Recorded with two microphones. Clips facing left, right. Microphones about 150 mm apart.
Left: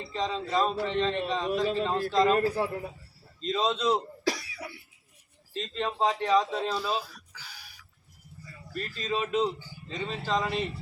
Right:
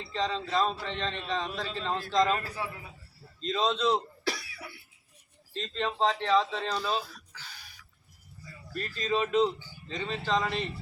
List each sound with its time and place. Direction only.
0.0 s speech: 5° left (ahead or behind)
2.3 s a man's voice: 40° left (ahead or behind)
3.4 s speech: 5° left (ahead or behind)
4.3 s cough: 40° left (ahead or behind)
5.5 s speech: 5° left (ahead or behind)